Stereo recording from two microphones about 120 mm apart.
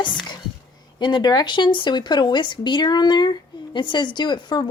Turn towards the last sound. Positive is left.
turn(degrees=40)  # may be behind; listen again after turning